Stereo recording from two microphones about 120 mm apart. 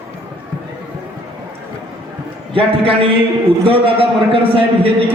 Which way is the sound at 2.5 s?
50° right (ahead or behind).